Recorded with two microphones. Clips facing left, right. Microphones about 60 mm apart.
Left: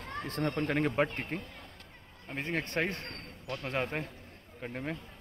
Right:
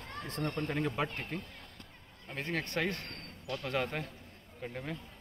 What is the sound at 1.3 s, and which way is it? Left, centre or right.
Speech, left.